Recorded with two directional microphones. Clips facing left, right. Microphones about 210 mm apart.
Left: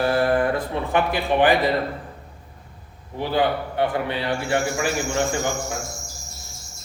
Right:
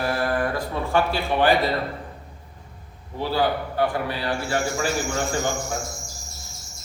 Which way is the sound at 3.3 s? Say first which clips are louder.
Left 2 dB; 25° left (ahead or behind).